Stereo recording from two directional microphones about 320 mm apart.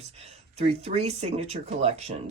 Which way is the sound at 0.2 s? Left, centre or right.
Centre.